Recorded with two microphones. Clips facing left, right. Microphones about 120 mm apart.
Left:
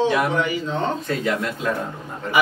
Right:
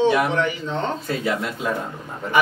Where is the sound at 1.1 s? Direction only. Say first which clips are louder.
Left 1 dB; 5° right (ahead or behind).